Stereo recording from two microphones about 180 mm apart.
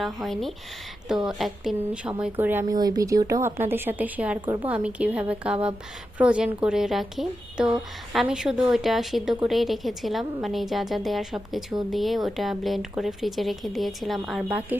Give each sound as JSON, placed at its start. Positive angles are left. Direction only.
{"t": 0.0, "sound": "speech", "side_deg": 0}
{"t": 2.7, "sound": "speech", "side_deg": -20}
{"t": 4.4, "sound": "a woman's voice", "side_deg": -25}
{"t": 4.6, "sound": "speech", "side_deg": -5}